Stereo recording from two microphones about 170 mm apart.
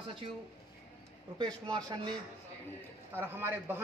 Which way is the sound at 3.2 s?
10° right (ahead or behind).